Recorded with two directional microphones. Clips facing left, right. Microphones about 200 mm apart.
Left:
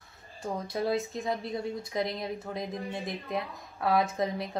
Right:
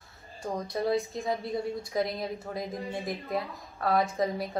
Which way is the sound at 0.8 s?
Centre (ahead or behind).